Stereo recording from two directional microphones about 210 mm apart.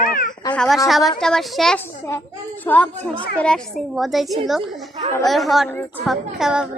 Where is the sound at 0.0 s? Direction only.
40° left (ahead or behind).